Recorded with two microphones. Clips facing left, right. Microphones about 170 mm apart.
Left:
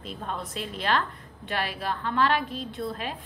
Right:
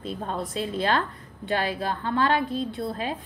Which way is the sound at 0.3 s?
35° right (ahead or behind).